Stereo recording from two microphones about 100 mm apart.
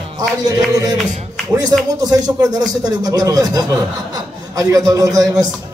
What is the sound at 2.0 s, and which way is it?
A man's voice, 40° right (ahead or behind).